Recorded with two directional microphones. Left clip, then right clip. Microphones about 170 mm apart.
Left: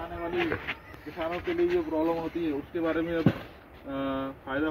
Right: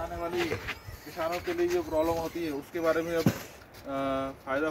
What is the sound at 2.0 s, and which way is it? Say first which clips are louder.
Speech: even; 15° right (ahead or behind).